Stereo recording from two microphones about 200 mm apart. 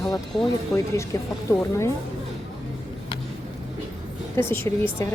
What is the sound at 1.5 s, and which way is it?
Speech, 15° left (ahead or behind).